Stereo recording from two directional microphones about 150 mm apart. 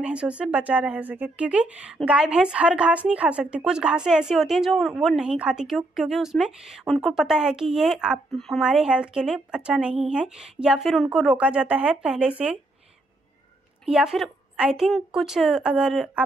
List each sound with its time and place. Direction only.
0.0 s speech: 5° right (ahead or behind)
13.8 s speech: 5° right (ahead or behind)